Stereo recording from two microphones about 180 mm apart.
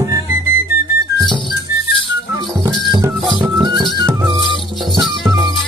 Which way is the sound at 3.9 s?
20° right (ahead or behind).